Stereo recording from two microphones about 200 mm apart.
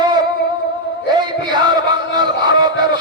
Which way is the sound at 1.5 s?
20° right (ahead or behind).